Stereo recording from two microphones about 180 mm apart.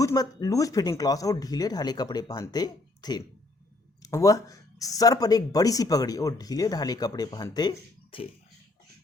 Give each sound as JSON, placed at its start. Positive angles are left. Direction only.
{"t": 0.0, "sound": "speech", "side_deg": 20}